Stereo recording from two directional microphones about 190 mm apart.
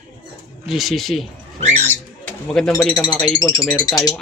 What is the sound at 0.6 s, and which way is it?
Speech, centre (ahead or behind).